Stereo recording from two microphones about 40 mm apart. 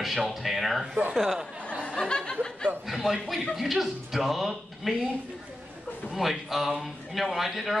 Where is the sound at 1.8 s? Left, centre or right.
Left.